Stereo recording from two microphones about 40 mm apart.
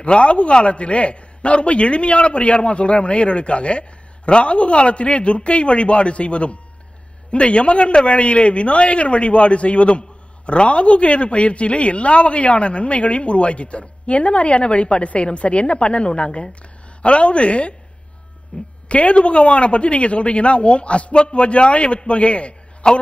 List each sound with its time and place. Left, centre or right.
0.0 s a man's voice: left